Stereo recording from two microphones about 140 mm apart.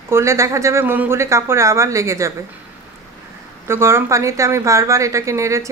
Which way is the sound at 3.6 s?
20° right (ahead or behind).